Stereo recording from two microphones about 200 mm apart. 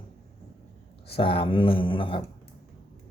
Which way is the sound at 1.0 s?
25° left (ahead or behind).